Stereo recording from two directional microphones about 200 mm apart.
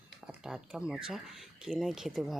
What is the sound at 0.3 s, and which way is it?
Speech, 5° right (ahead or behind).